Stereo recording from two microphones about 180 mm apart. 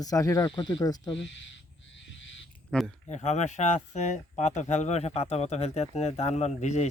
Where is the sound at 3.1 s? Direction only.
40° left (ahead or behind).